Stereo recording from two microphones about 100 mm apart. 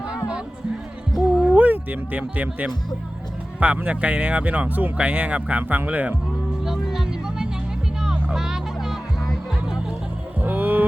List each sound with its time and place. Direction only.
1.4 s speech: 15° right (ahead or behind)
6.7 s music: 5° right (ahead or behind)
10.4 s a sound: 15° right (ahead or behind)